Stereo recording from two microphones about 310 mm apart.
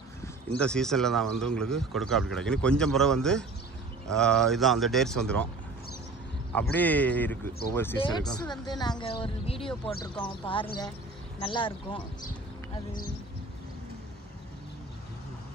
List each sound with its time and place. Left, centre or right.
0.6 s speech: centre
6.5 s speech: centre